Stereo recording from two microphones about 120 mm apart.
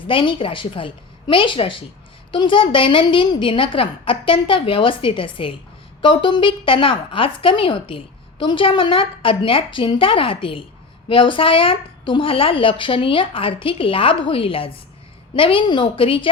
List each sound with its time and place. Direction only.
0.1 s a woman's voice: 45° left (ahead or behind)